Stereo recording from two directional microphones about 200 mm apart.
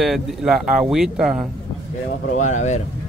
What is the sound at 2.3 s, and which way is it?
Speech, 35° left (ahead or behind).